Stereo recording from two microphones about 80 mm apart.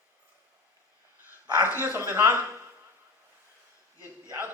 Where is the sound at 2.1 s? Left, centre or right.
Right.